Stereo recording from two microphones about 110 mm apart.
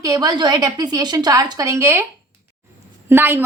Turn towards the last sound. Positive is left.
turn(degrees=-20)  # may be behind; listen again after turning